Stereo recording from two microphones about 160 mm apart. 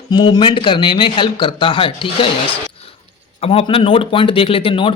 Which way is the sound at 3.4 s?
35° left (ahead or behind).